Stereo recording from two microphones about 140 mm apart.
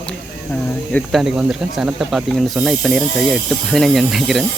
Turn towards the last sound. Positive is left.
turn(degrees=0)  # may be behind; listen again after turning